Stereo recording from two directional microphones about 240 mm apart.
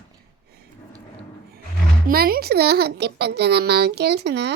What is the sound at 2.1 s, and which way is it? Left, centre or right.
A child's voice, right.